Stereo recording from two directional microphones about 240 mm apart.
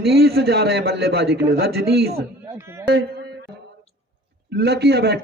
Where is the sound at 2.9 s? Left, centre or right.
Right.